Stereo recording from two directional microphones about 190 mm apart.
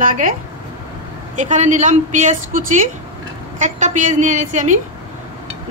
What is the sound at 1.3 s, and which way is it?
Speech, 40° right (ahead or behind).